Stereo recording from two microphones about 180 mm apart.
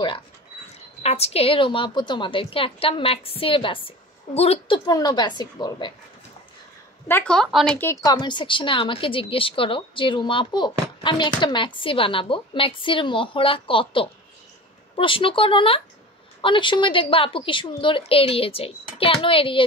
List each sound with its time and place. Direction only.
1.0 s a woman's voice: 35° left (ahead or behind)
7.1 s a woman's voice: 10° left (ahead or behind); by 19.6 s 30° left (ahead or behind)